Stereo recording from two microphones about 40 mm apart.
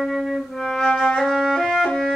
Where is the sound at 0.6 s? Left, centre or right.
Centre.